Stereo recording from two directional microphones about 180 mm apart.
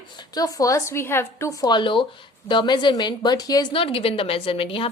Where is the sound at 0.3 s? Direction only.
20° left (ahead or behind).